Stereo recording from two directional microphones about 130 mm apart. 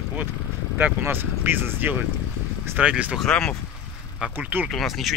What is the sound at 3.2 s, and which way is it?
Speech, 5° left (ahead or behind).